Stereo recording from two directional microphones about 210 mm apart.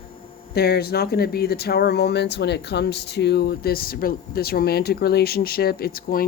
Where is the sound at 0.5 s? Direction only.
50° left (ahead or behind).